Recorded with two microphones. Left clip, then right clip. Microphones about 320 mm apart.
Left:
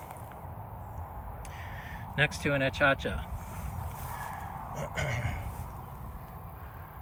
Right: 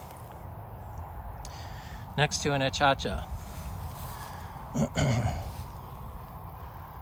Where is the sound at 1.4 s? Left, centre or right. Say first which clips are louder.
Left 1 dB; centre.